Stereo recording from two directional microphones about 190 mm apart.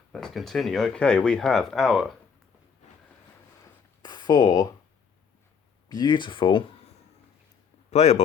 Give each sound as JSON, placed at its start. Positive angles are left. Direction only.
{"t": 0.1, "sound": "speech", "side_deg": 0}
{"t": 4.0, "sound": "a sound", "side_deg": 20}
{"t": 5.9, "sound": "speech", "side_deg": 20}
{"t": 7.9, "sound": "speech", "side_deg": 35}